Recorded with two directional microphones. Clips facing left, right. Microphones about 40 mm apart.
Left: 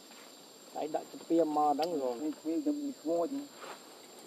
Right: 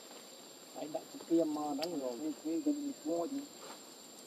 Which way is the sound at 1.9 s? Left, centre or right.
Left.